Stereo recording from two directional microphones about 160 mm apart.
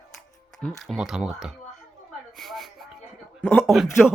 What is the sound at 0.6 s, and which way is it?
Speech, centre (ahead or behind).